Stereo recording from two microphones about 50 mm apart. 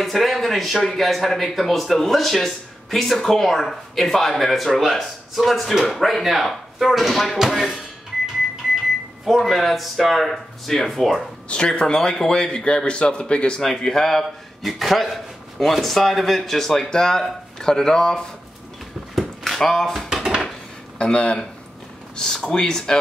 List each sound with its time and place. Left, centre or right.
0.0 s speech: centre
9.4 s speech: centre
11.4 s a man's voice: centre
13.7 s speech: centre
19.1 s a sound: centre
20.2 s dishes: centre
21.0 s a man's voice: left